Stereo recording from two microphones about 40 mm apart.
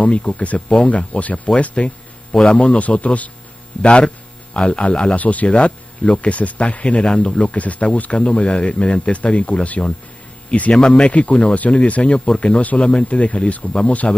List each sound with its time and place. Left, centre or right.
0.0 s speech: left
0.6 s speech: centre
0.8 s speech: left